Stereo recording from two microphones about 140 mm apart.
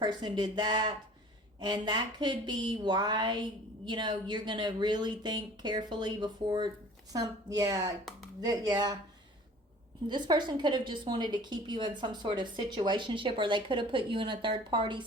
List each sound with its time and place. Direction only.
0.0 s a woman's voice: 30° right (ahead or behind)
10.1 s a woman's voice: 30° right (ahead or behind)